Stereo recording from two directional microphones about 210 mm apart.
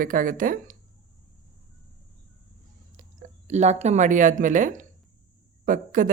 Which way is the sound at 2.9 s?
35° right (ahead or behind).